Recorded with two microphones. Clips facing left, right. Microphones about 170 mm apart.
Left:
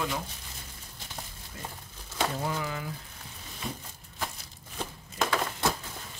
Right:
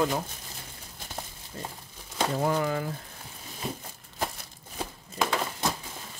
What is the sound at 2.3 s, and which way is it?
Speech, 55° right (ahead or behind).